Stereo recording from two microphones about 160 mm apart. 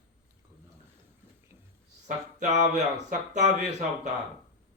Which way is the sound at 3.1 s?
45° right (ahead or behind).